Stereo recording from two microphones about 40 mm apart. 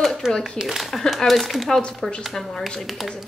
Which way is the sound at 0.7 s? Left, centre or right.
Centre.